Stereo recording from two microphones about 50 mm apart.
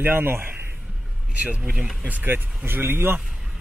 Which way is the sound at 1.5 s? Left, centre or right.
Right.